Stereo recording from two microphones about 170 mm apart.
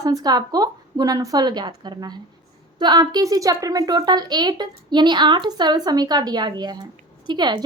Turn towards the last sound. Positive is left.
turn(degrees=-25)  # may be behind; listen again after turning